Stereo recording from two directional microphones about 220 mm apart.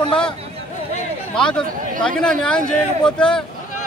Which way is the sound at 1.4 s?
5° left (ahead or behind).